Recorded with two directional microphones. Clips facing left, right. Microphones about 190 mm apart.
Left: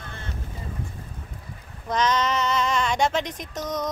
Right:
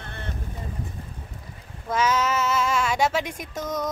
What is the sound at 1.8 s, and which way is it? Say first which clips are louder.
Female singing: even; 5° right (ahead or behind).